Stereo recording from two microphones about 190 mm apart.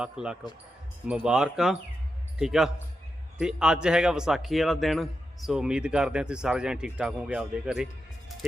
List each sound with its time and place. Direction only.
0.0 s a man's voice: 5° right (ahead or behind)